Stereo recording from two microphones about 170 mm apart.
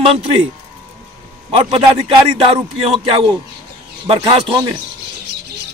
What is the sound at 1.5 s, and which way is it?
A man's voice, 35° right (ahead or behind).